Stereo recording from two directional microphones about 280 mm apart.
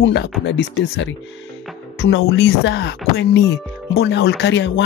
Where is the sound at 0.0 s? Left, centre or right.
Left.